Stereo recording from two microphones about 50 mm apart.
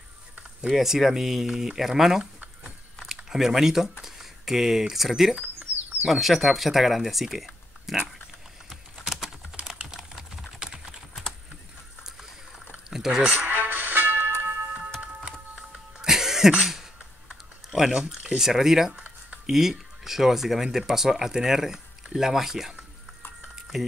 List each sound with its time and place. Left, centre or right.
0.7 s speech: centre
3.3 s speech: centre
8.6 s typing: centre
10.6 s typing: centre
12.0 s rowboat: centre
12.7 s a sound: centre
13.5 s music: right
15.5 s music: centre
17.6 s speech: centre
18.9 s a sound: right
19.4 s speech: centre
23.4 s a sound: centre